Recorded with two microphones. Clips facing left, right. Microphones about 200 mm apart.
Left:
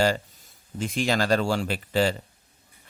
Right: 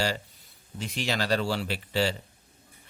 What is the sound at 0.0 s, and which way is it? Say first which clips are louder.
Speech: left 6 dB; 50° left (ahead or behind).